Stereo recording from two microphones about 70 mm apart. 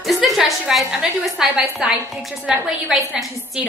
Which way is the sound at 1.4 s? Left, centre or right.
Centre.